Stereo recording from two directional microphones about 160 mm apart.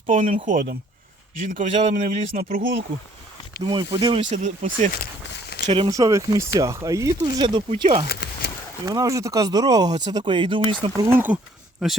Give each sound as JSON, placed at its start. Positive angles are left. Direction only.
{"t": 0.1, "sound": "a man's voice", "side_deg": -50}
{"t": 2.4, "sound": "speech", "side_deg": -60}
{"t": 3.6, "sound": "speech", "side_deg": -30}
{"t": 4.4, "sound": "a man's voice", "side_deg": -50}
{"t": 5.6, "sound": "speech", "side_deg": -35}
{"t": 5.9, "sound": "speech", "side_deg": -20}
{"t": 8.0, "sound": "a sound", "side_deg": 85}
{"t": 8.8, "sound": "speech", "side_deg": -25}
{"t": 11.1, "sound": "speech", "side_deg": -10}